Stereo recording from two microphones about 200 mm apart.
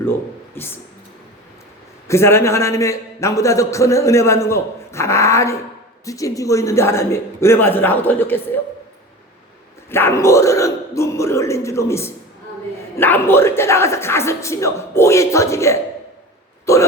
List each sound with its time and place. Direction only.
0.0 s speech: 10° left (ahead or behind)
2.0 s a man's voice: 15° left (ahead or behind)
9.9 s a man's voice: 10° left (ahead or behind)
16.7 s hiccup: 15° left (ahead or behind)